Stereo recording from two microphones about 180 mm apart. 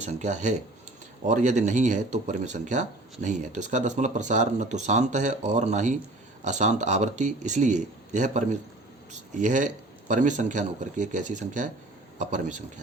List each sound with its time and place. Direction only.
0.0 s speech: 40° right (ahead or behind)